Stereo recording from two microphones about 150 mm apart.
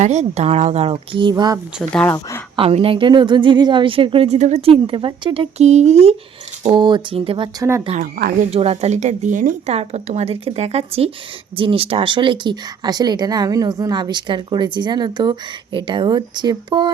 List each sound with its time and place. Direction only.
0.0 s speech: 50° right (ahead or behind); by 1.5 s 30° right (ahead or behind)
1.9 s speech: 5° left (ahead or behind)
2.6 s a woman's voice: 40° right (ahead or behind)
6.6 s a woman's voice: 30° right (ahead or behind)
8.0 s speech: 70° right (ahead or behind)
8.4 s speech: 40° right (ahead or behind)